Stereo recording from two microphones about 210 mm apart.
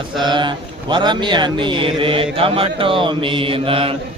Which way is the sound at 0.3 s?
20° right (ahead or behind).